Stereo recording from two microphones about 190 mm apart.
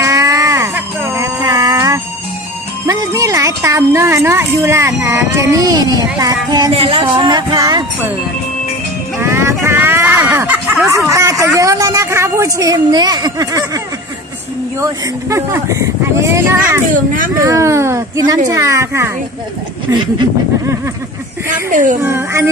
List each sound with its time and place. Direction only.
0.0 s a sound: 15° right (ahead or behind)
2.9 s speech: 15° right (ahead or behind)
6.7 s music: 30° right (ahead or behind)
9.2 s speech: 15° right (ahead or behind)
11.1 s speech: 15° right (ahead or behind)
14.8 s speech: 15° right (ahead or behind)
16.9 s speech: 45° right (ahead or behind)
17.5 s speech: 15° right (ahead or behind)
19.9 s music: 20° right (ahead or behind)
21.6 s speech: 45° right (ahead or behind)
22.0 s speech: 15° right (ahead or behind)